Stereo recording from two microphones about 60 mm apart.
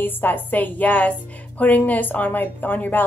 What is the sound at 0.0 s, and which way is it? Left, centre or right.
A woman's voice, left.